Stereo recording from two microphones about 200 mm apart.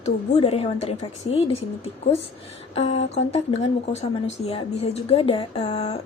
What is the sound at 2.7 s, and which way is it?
A woman's voice, 30° left (ahead or behind).